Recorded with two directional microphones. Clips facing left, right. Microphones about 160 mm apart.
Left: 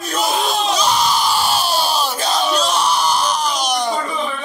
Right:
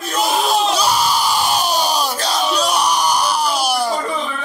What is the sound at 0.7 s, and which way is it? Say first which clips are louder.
Crowd: even; 10° right (ahead or behind).